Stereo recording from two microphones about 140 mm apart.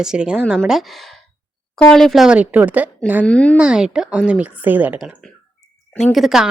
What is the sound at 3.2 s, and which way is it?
Speech, 10° left (ahead or behind).